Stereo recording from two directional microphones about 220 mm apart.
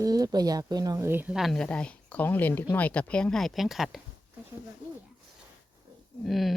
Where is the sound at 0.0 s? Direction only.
15° right (ahead or behind); by 4.0 s centre (ahead or behind).